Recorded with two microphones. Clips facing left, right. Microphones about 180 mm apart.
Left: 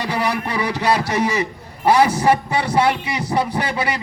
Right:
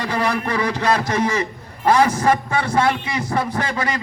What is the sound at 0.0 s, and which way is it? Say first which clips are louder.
A man's voice: even; 10° left (ahead or behind).